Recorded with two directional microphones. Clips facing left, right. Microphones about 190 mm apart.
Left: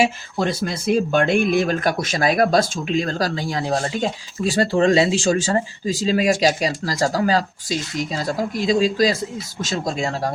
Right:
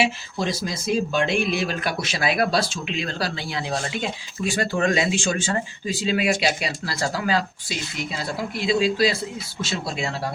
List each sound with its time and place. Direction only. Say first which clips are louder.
0.0 s speech: left 4 dB; 55° left (ahead or behind)